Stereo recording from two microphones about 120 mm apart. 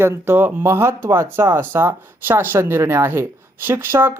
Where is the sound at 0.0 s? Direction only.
20° right (ahead or behind).